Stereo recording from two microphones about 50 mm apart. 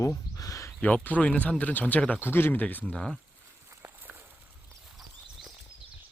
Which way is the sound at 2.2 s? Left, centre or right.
Left.